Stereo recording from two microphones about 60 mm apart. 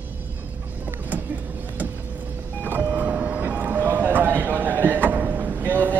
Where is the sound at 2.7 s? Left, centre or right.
Right.